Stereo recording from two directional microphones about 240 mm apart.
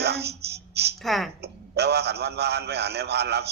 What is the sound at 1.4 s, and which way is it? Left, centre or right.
A man's voice, right.